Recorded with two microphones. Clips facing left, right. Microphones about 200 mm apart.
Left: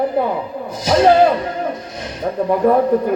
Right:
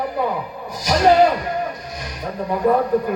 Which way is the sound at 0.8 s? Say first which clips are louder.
Left 3 dB; 25° left (ahead or behind).